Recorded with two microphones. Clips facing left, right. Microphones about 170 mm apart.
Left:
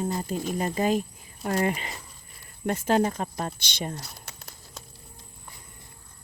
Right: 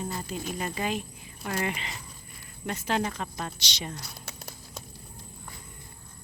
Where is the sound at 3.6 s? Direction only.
50° left (ahead or behind).